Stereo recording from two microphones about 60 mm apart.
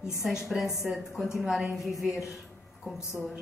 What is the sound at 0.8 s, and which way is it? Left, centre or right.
Speech, centre.